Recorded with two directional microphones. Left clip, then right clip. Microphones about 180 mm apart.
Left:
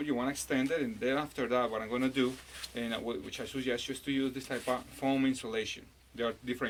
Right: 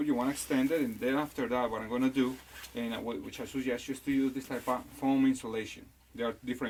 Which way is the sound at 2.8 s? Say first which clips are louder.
Left 1 dB; 15° left (ahead or behind).